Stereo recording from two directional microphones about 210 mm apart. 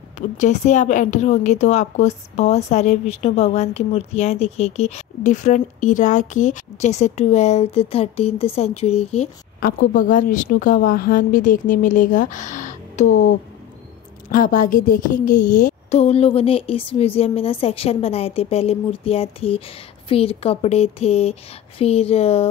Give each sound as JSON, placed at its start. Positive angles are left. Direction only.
{"t": 0.4, "sound": "a woman's voice", "side_deg": 35}
{"t": 9.6, "sound": "a woman's voice", "side_deg": 40}
{"t": 14.3, "sound": "a woman's voice", "side_deg": 40}